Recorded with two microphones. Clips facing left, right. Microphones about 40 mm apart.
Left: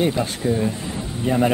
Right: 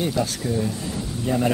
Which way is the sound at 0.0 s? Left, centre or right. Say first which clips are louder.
Left 3 dB; left.